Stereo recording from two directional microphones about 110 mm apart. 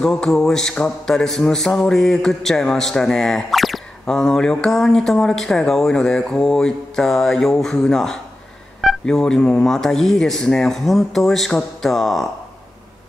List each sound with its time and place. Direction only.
0.0 s speech: 5° left (ahead or behind)